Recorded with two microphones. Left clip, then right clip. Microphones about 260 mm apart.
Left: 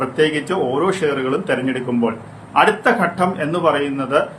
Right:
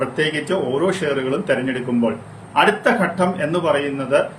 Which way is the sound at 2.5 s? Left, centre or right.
Centre.